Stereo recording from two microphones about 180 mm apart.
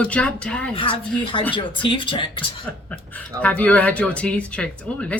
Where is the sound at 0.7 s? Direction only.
30° left (ahead or behind).